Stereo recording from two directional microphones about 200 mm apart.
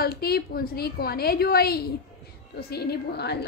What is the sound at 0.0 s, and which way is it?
A woman's voice, 50° left (ahead or behind).